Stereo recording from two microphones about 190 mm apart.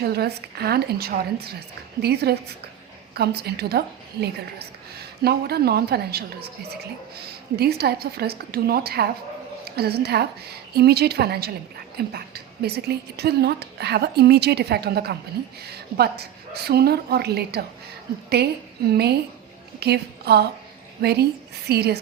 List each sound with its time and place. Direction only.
0.0 s a woman's voice: 55° right (ahead or behind)